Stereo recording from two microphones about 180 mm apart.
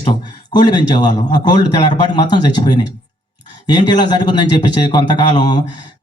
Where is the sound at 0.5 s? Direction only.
25° left (ahead or behind).